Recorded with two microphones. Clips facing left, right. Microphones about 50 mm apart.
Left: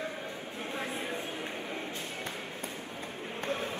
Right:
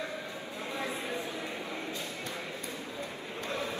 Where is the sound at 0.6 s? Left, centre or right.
Left.